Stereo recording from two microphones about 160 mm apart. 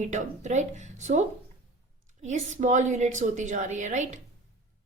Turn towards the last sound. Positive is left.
turn(degrees=-50)  # may be behind; listen again after turning